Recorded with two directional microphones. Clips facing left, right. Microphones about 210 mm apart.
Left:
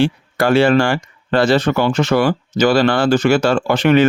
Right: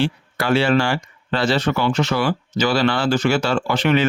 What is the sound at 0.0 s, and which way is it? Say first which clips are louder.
Speech: left 6 dB; 45° left (ahead or behind).